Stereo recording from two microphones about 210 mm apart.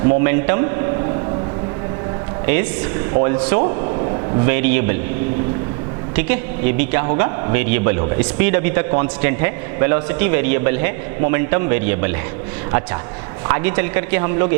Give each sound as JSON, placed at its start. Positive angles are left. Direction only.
{"t": 0.2, "sound": "a man's voice", "side_deg": -15}
{"t": 2.5, "sound": "a man's voice", "side_deg": -15}
{"t": 3.6, "sound": "a sound", "side_deg": -30}
{"t": 4.4, "sound": "a man's voice", "side_deg": -15}
{"t": 6.1, "sound": "a man's voice", "side_deg": -15}
{"t": 13.5, "sound": "a man's voice", "side_deg": -15}